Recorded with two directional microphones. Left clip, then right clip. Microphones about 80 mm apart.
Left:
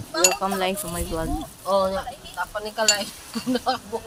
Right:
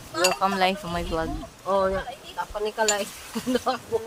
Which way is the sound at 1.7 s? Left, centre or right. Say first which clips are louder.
Left 2 dB; left.